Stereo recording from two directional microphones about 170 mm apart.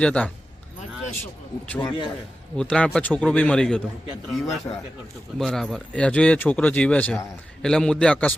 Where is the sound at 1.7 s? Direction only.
15° left (ahead or behind).